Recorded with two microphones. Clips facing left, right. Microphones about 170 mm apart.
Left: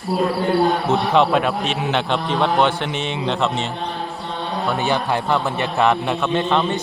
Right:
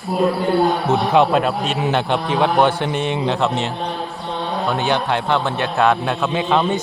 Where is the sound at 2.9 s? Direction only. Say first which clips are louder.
Right 4 dB; 50° right (ahead or behind).